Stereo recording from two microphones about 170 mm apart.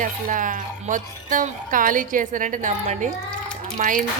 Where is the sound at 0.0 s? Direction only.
50° right (ahead or behind).